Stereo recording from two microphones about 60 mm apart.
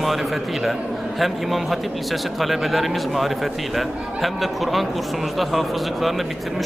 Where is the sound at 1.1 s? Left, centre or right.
Centre.